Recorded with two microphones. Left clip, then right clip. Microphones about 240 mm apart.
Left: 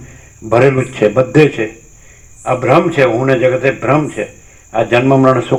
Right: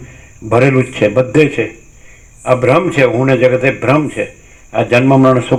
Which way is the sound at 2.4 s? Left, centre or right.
Right.